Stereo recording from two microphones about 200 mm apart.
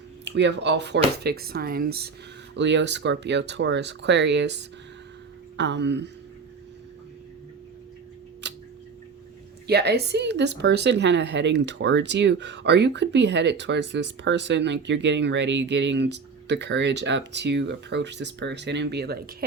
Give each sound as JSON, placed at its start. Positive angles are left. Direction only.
{"t": 0.3, "sound": "speech", "side_deg": -60}
{"t": 2.6, "sound": "speech", "side_deg": -60}
{"t": 8.4, "sound": "scissors", "side_deg": -60}
{"t": 9.6, "sound": "speech", "side_deg": -55}